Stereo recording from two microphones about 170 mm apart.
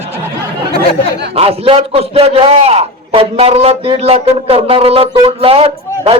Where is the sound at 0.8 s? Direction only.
75° right (ahead or behind).